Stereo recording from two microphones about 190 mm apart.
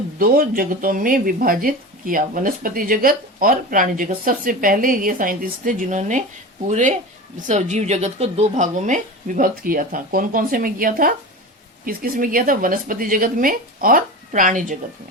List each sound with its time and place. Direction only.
0.2 s speech: 50° right (ahead or behind)